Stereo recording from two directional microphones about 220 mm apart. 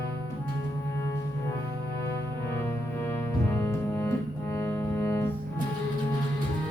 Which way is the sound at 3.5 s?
10° left (ahead or behind).